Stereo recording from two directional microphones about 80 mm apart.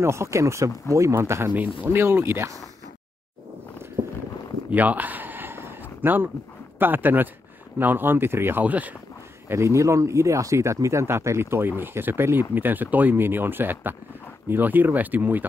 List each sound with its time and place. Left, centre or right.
0.0 s speech: right
4.6 s a sound: centre
6.8 s speech: right
9.5 s speech: right